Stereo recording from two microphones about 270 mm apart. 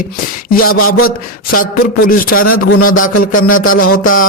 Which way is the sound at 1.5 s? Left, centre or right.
Left.